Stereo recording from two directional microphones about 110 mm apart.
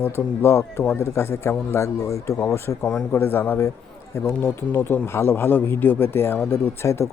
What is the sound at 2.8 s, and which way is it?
A man's voice, 5° left (ahead or behind).